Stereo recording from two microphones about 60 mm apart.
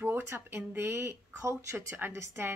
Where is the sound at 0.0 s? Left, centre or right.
Right.